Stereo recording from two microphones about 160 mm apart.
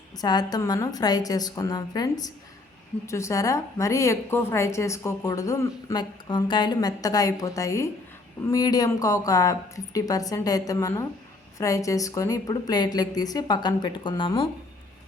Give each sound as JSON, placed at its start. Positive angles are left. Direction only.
{"t": 0.2, "sound": "a woman's voice", "side_deg": 25}